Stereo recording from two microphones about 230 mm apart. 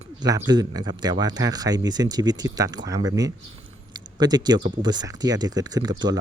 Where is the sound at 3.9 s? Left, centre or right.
Centre.